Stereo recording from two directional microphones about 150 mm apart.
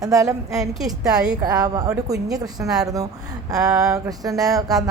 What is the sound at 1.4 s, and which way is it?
Speech, 25° right (ahead or behind).